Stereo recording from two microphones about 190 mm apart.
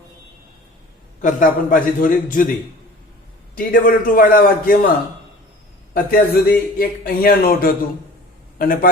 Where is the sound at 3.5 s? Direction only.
45° left (ahead or behind).